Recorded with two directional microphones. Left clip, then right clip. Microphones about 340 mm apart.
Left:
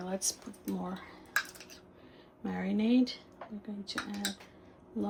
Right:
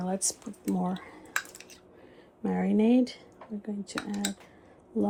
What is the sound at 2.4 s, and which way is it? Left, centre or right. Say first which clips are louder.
Speech: right 7 dB; right.